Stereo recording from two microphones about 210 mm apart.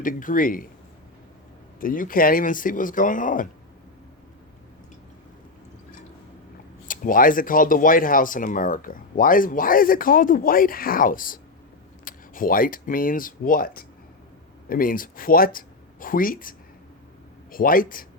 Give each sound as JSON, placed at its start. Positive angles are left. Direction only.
{"t": 0.0, "sound": "speech", "side_deg": 40}
{"t": 1.8, "sound": "speech", "side_deg": 40}
{"t": 6.8, "sound": "speech", "side_deg": 40}